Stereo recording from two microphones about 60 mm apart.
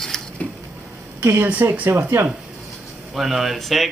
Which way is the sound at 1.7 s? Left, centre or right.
Right.